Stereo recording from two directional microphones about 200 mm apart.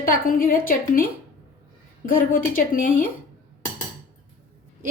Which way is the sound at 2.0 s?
45° left (ahead or behind).